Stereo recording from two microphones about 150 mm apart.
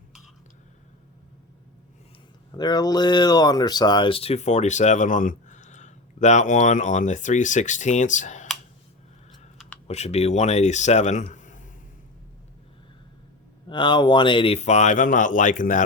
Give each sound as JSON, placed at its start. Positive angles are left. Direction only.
{"t": 2.6, "sound": "speech", "side_deg": 25}
{"t": 9.8, "sound": "speech", "side_deg": 45}
{"t": 13.7, "sound": "speech", "side_deg": 30}